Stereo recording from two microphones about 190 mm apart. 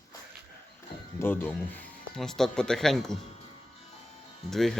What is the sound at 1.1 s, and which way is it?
Speech, 10° left (ahead or behind).